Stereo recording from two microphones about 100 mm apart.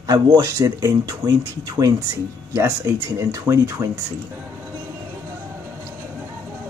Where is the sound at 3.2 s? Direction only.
30° right (ahead or behind).